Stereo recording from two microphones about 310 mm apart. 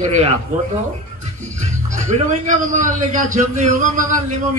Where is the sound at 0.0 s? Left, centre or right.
Right.